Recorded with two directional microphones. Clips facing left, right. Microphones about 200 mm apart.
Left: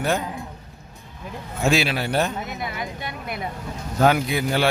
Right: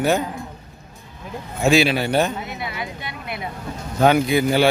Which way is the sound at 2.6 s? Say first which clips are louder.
Even; 45° left (ahead or behind).